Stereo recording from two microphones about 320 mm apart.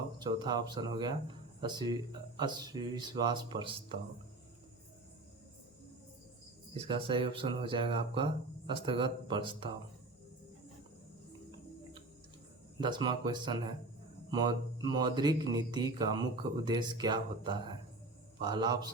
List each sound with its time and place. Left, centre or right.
0.2 s speech: centre
6.7 s speech: centre
12.8 s speech: centre